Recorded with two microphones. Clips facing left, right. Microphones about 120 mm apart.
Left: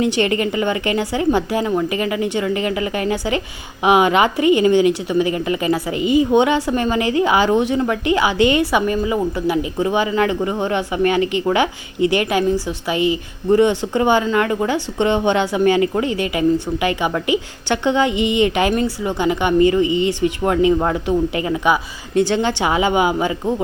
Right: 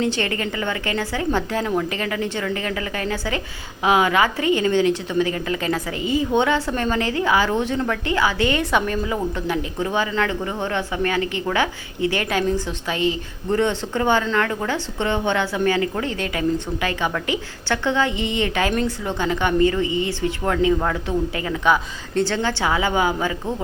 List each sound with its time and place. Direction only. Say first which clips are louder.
0.0 s a woman's voice: left 5 dB; 15° left (ahead or behind)